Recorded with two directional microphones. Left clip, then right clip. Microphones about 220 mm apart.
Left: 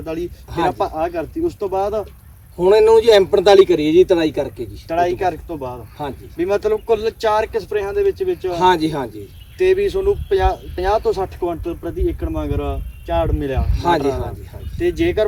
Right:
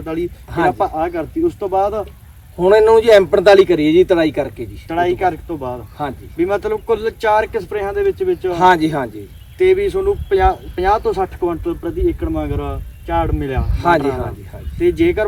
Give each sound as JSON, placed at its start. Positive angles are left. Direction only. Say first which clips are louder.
{"t": 0.0, "sound": "speech", "louder": "right 3 dB", "side_deg": 0}